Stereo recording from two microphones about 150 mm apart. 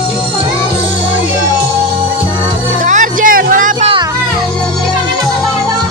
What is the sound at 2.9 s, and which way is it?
Music, 60° right (ahead or behind).